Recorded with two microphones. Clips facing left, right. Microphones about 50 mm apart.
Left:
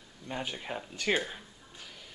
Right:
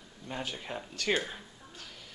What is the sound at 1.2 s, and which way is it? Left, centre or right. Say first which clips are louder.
Speech: left 1 dB; centre.